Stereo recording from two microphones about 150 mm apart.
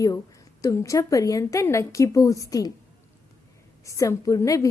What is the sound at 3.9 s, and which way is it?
Speech, 20° left (ahead or behind).